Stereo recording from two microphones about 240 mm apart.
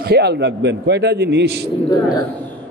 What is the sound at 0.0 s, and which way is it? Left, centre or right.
A man's voice, right.